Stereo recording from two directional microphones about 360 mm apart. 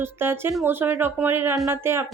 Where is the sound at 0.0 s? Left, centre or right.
Centre.